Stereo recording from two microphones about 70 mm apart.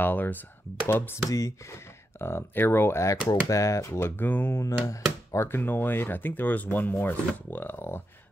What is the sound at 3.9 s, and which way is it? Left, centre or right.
Speech, left.